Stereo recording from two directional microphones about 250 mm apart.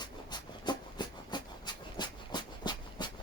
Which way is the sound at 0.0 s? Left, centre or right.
Centre.